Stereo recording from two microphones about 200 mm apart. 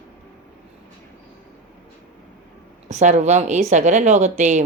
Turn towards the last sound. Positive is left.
turn(degrees=-35)  # may be behind; listen again after turning